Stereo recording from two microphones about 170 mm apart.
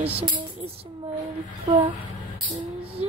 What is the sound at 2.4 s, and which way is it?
Music, 35° right (ahead or behind).